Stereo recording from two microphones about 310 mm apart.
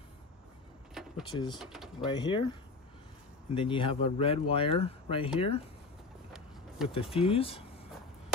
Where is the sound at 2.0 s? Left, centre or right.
Centre.